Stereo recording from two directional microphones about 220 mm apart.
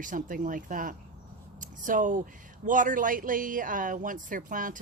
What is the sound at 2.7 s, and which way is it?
Speech, 35° right (ahead or behind).